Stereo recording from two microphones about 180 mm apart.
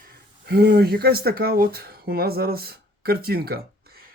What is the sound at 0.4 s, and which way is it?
Speech, 60° right (ahead or behind).